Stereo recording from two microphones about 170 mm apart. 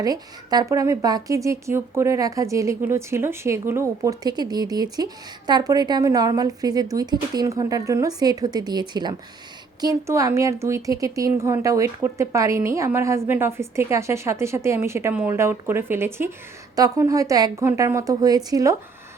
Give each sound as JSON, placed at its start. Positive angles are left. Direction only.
{"t": 0.0, "sound": "speech", "side_deg": -20}